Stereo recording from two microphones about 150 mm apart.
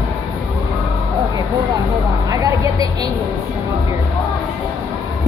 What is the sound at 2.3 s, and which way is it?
Vehicle, 20° right (ahead or behind).